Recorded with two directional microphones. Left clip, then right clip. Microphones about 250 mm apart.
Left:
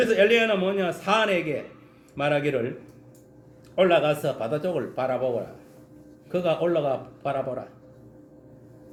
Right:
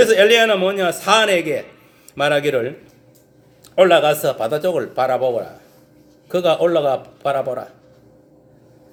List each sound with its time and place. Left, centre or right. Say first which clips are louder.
0.0 s a man's voice: right 8 dB; centre
3.8 s a man's voice: right 8 dB; centre
6.3 s a man's voice: right 8 dB; centre